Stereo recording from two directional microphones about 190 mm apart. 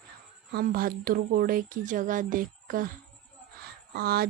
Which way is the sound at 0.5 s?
50° right (ahead or behind).